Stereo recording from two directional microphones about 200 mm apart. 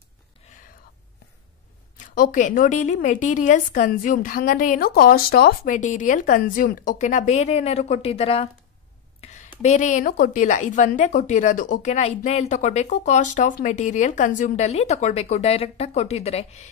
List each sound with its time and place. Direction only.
2.0 s a woman's voice: 40° left (ahead or behind)